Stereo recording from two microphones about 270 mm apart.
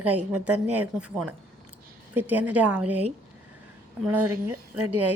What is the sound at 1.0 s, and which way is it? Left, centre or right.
Speech, centre.